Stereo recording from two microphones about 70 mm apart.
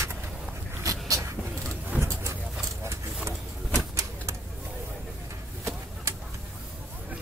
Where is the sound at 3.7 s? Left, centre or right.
Right.